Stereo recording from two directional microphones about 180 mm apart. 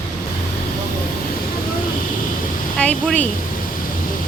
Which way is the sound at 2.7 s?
5° left (ahead or behind).